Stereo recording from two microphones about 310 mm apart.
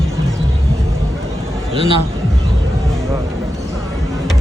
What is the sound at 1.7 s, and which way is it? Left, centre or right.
Speech, centre.